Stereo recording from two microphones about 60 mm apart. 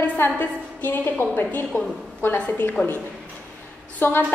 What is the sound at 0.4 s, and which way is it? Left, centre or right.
A woman's voice, left.